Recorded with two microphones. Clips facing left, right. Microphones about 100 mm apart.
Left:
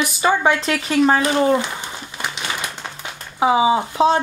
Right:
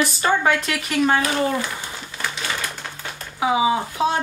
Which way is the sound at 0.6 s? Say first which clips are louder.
Left 4 dB; 25° left (ahead or behind).